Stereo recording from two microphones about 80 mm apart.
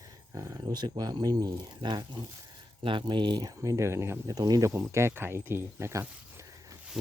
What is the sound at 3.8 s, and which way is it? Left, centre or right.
Speech, right.